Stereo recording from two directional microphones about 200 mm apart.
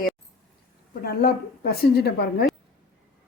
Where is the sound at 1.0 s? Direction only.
50° left (ahead or behind).